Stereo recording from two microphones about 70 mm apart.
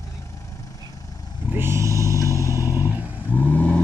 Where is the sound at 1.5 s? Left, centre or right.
Right.